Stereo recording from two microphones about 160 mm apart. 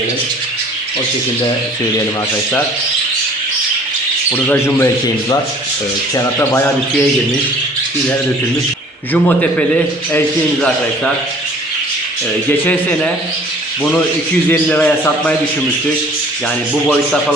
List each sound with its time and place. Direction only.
4.3 s a man's voice: 15° left (ahead or behind)
6.4 s a man's voice: 15° left (ahead or behind)
9.1 s a man's voice: 10° left (ahead or behind)
12.5 s a man's voice: 10° left (ahead or behind)
14.5 s a man's voice: 10° left (ahead or behind)